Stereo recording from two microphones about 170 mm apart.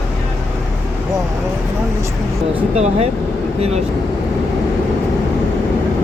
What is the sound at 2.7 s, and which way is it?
Speech, 40° right (ahead or behind).